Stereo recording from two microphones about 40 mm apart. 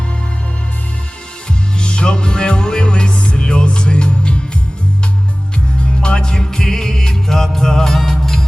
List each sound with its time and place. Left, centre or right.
1.8 s music: left
6.0 s music: left